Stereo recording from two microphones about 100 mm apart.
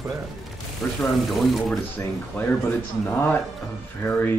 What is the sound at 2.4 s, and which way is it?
Speech, 20° left (ahead or behind).